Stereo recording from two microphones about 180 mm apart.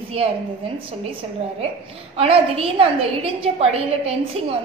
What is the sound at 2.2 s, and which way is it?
A woman's voice, 30° right (ahead or behind).